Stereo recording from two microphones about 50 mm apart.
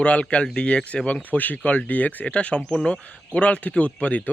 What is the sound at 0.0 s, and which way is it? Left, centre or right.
Speech, left.